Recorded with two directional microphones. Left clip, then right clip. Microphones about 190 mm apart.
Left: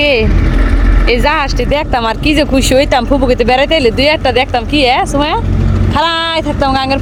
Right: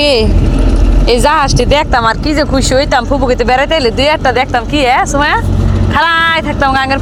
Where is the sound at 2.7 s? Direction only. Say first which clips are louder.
Left 1 dB; 25° left (ahead or behind).